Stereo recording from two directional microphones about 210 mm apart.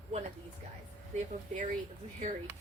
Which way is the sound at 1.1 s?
35° right (ahead or behind).